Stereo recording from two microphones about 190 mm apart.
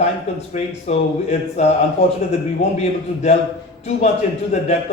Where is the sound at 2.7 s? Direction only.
35° left (ahead or behind).